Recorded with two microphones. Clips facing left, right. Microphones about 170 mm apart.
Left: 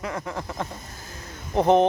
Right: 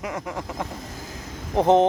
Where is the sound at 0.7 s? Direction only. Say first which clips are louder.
Right 4 dB; 90° right.